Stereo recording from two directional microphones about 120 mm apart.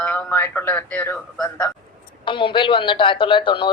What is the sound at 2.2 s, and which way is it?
A woman's voice, 45° left (ahead or behind).